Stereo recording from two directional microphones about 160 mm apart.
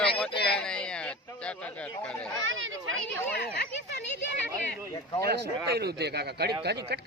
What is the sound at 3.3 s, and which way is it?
Speech, 90° left.